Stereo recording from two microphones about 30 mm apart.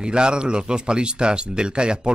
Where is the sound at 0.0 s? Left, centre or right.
Right.